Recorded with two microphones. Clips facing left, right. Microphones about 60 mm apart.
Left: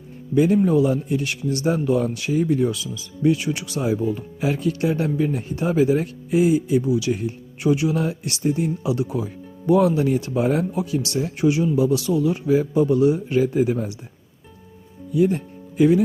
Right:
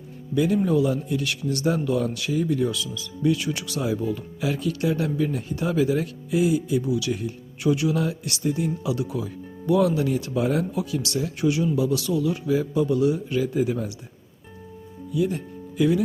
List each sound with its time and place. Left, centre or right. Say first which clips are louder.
0.3 s speech: left 4 dB; left
15.1 s speech: left 5 dB; left